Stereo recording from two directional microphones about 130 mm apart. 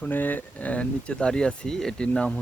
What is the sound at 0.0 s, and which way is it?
Speech, 15° left (ahead or behind).